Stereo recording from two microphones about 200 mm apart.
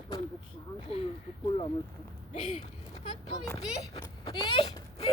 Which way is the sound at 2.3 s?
35° left (ahead or behind).